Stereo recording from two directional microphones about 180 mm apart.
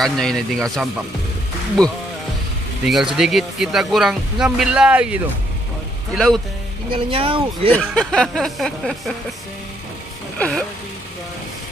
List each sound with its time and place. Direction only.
0.0 s speech: 5° left (ahead or behind)
6.9 s speech: 30° right (ahead or behind)
7.7 s speech: 5° left (ahead or behind)
10.3 s speech: 5° left (ahead or behind)